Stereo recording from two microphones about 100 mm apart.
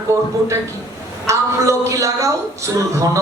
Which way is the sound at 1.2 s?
30° right (ahead or behind).